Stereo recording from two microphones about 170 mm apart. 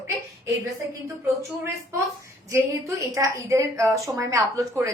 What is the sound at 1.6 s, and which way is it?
A woman's voice, 15° right (ahead or behind).